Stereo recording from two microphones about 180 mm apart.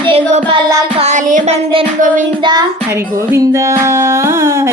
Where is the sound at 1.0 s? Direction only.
40° right (ahead or behind).